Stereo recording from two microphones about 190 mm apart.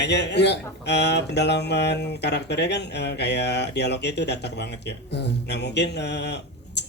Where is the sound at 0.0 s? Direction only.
65° left (ahead or behind).